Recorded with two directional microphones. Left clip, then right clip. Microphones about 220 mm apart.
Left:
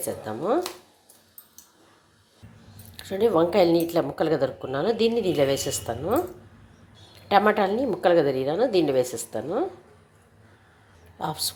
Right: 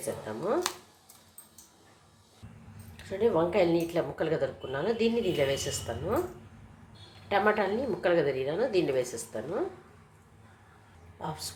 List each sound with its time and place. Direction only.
0.3 s a woman's voice: 25° left (ahead or behind)
3.0 s a woman's voice: 35° left (ahead or behind)
7.3 s a woman's voice: 35° left (ahead or behind)
11.2 s a woman's voice: 30° left (ahead or behind)